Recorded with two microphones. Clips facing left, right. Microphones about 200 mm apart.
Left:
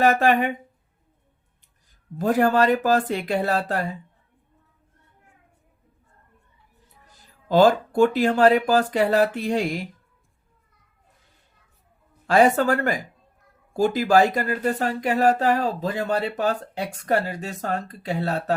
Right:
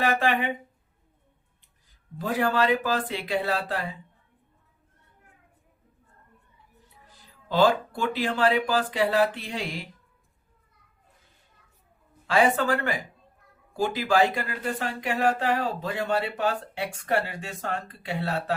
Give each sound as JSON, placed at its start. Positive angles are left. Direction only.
{"t": 0.0, "sound": "speech", "side_deg": 45}
{"t": 2.1, "sound": "speech", "side_deg": 45}
{"t": 7.4, "sound": "speech", "side_deg": 45}
{"t": 12.3, "sound": "speech", "side_deg": 45}